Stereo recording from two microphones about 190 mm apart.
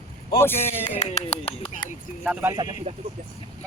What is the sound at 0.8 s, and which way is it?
Speech, 30° left (ahead or behind).